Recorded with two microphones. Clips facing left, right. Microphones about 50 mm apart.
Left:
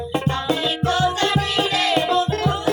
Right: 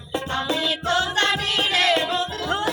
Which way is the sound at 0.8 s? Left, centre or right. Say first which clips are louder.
Left 2 dB; right.